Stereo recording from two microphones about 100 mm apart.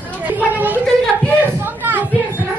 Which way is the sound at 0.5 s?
20° right (ahead or behind).